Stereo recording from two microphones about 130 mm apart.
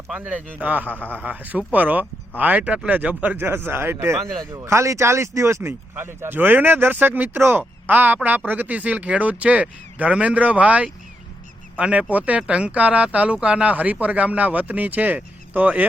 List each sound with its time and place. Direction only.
0.6 s speech: 10° right (ahead or behind)